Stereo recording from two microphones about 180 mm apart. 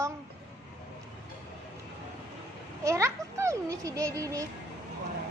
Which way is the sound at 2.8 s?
15° right (ahead or behind).